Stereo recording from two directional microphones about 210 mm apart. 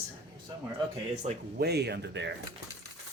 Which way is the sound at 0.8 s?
30° right (ahead or behind).